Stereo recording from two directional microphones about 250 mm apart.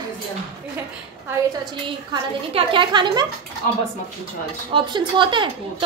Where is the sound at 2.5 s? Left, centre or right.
Centre.